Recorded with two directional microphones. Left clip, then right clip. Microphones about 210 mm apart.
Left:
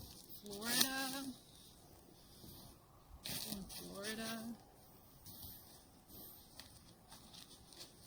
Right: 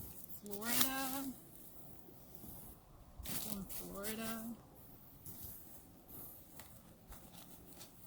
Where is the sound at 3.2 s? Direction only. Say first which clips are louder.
Left 1 dB; centre (ahead or behind).